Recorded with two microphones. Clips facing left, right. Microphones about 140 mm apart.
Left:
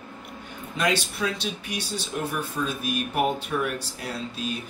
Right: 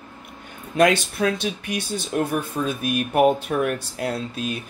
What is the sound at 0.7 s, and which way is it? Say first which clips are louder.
Speech: right 8 dB; 55° right (ahead or behind).